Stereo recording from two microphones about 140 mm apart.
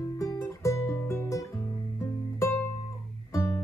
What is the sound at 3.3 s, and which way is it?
Music, 20° left (ahead or behind).